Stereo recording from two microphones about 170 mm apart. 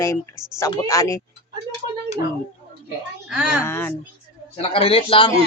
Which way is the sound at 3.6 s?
15° left (ahead or behind).